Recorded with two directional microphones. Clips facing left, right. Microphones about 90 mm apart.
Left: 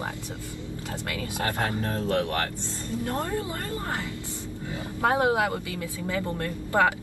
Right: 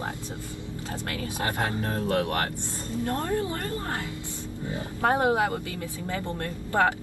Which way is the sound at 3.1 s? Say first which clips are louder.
Right 3 dB; 20° left (ahead or behind).